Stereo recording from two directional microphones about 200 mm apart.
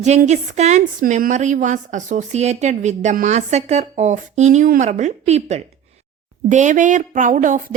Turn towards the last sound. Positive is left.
turn(degrees=-40)  # may be behind; listen again after turning